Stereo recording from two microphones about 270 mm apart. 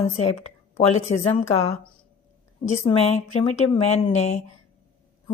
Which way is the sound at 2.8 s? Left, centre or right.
Left.